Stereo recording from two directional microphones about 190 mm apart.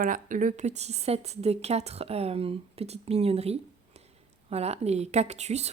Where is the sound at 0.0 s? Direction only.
45° right (ahead or behind).